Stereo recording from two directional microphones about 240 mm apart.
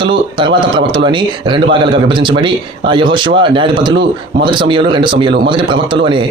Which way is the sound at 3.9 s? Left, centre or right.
Right.